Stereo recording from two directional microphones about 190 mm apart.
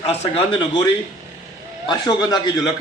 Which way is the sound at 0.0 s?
30° left (ahead or behind).